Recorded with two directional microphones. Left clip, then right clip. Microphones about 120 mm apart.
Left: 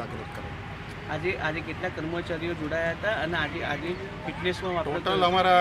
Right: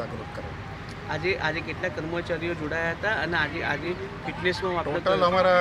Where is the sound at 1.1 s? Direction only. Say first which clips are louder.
Right 2 dB; 40° right (ahead or behind).